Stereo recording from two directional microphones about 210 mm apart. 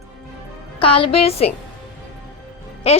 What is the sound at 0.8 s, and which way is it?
Speech, 25° left (ahead or behind).